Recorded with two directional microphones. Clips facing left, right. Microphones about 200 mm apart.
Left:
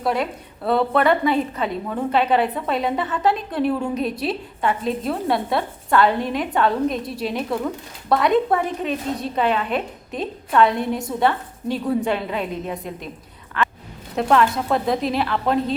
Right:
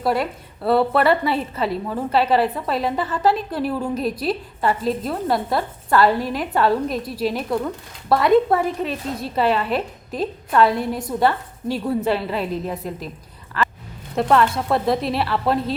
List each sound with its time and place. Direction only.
0.0 s a woman's voice: 5° right (ahead or behind)
13.6 s a sound: centre (ahead or behind)
14.2 s a woman's voice: centre (ahead or behind)